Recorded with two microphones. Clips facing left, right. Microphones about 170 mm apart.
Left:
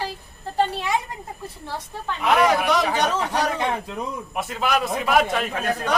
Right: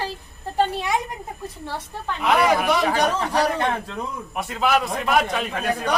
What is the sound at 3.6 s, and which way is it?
A man's voice, 10° left (ahead or behind).